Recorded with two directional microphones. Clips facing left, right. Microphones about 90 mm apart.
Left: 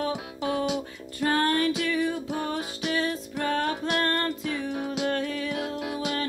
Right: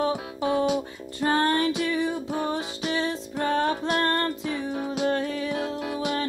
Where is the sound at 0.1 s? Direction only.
30° right (ahead or behind).